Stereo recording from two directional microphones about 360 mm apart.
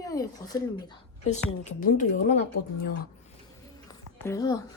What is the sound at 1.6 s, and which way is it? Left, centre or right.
Speech, left.